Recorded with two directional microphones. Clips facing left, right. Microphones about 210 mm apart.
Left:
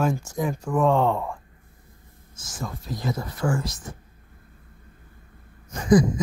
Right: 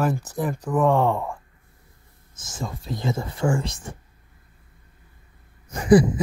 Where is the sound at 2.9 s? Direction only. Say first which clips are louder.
Right 2 dB; 25° right (ahead or behind).